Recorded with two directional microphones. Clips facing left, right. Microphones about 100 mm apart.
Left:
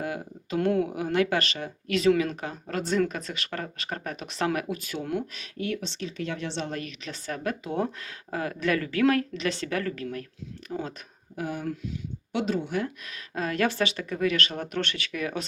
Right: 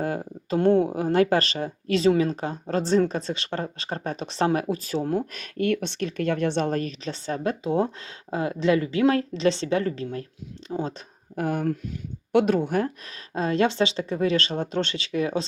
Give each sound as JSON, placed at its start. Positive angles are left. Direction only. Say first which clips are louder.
{"t": 0.0, "sound": "speech", "louder": "right 5 dB", "side_deg": -35}
{"t": 11.3, "sound": "speech", "louder": "right 6 dB", "side_deg": -50}